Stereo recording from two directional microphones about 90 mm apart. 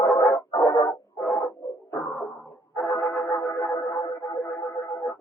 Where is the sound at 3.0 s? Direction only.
15° left (ahead or behind).